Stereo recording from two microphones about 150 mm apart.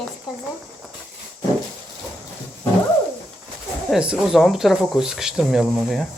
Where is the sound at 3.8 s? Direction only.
5° right (ahead or behind).